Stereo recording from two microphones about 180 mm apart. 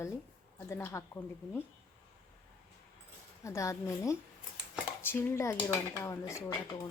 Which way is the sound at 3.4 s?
15° left (ahead or behind).